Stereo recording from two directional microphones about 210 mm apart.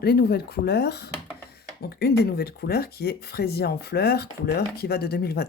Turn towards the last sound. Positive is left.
turn(degrees=50)  # may be behind; listen again after turning